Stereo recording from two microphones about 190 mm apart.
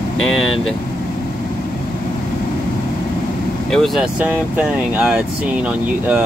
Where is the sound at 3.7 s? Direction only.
Centre (ahead or behind).